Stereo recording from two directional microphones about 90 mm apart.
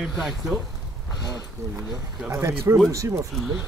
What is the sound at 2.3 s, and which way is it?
A man's voice, 30° right (ahead or behind).